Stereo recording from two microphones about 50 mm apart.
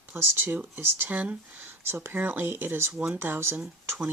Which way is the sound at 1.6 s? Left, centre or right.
Right.